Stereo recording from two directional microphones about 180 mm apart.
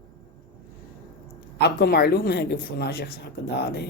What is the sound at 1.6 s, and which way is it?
Speech, 60° left (ahead or behind).